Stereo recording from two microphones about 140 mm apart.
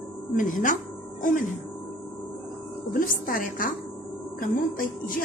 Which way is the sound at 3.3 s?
80° left.